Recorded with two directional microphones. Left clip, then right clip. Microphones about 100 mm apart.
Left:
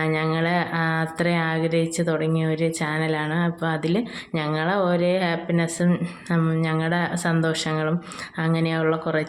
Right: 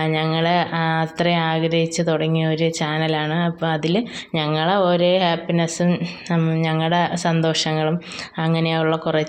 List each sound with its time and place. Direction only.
0.0 s speech: 15° right (ahead or behind)